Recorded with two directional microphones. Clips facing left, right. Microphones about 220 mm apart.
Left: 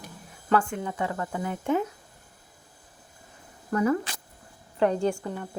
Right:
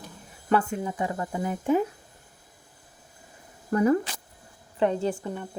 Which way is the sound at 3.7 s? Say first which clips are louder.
Right 2 dB; 30° right (ahead or behind).